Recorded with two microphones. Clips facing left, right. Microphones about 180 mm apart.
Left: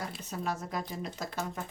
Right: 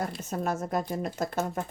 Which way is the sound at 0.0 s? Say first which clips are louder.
Right 5 dB; 50° right (ahead or behind).